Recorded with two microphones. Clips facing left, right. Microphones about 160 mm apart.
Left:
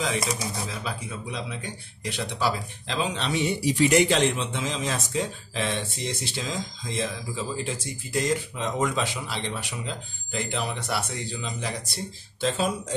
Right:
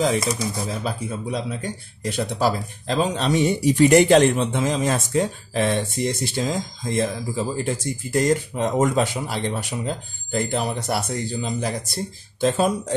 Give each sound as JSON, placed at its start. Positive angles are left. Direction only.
{"t": 0.7, "sound": "speech", "side_deg": -40}